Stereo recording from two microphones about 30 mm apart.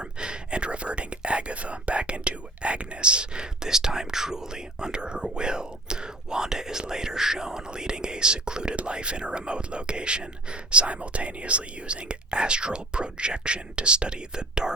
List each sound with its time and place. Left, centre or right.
0.0 s speech: right